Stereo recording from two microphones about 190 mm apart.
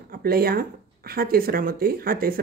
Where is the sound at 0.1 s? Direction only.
55° right (ahead or behind).